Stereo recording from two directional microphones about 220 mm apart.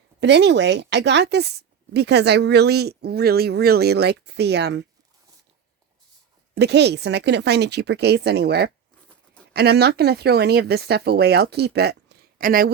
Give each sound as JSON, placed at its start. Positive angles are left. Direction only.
{"t": 0.2, "sound": "a woman's voice", "side_deg": -50}
{"t": 6.5, "sound": "a woman's voice", "side_deg": -50}